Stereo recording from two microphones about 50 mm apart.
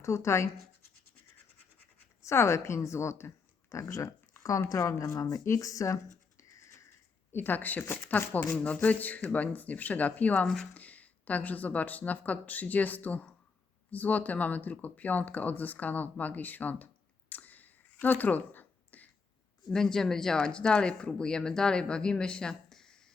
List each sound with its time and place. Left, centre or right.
0.0 s speech: left
2.2 s speech: left
7.3 s speech: left
8.5 s speech: left
10.4 s speech: centre
10.8 s speech: left
19.7 s speech: centre